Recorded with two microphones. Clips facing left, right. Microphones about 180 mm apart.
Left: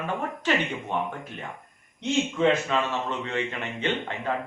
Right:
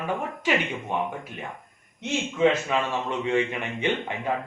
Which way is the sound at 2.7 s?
15° right (ahead or behind).